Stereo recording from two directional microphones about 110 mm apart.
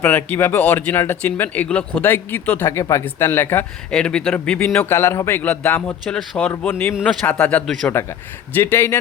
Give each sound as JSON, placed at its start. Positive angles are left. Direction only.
{"t": 0.0, "sound": "speech", "side_deg": 20}
{"t": 3.9, "sound": "speech", "side_deg": 5}
{"t": 6.1, "sound": "speech", "side_deg": 5}
{"t": 6.7, "sound": "speech", "side_deg": 20}
{"t": 7.0, "sound": "speech", "side_deg": 5}